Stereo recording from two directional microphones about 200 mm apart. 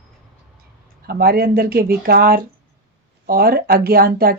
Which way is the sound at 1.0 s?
50° right (ahead or behind).